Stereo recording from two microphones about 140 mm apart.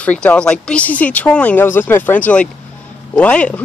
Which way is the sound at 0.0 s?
10° left (ahead or behind).